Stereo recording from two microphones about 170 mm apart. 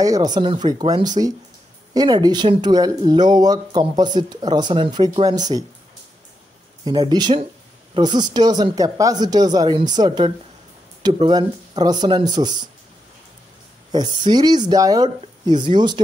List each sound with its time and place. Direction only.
0.0 s speech: 20° right (ahead or behind)
6.8 s speech: 25° right (ahead or behind)
13.9 s speech: 25° right (ahead or behind)